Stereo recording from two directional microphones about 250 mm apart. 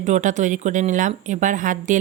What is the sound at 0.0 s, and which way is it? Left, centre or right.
Speech, right.